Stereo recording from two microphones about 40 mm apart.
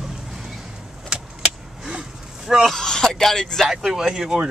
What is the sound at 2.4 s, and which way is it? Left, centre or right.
Speech, centre.